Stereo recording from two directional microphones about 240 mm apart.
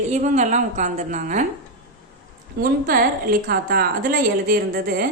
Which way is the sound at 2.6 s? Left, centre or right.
Right.